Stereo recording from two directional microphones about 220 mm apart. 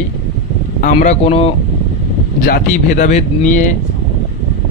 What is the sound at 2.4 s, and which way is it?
Speech, 40° left (ahead or behind).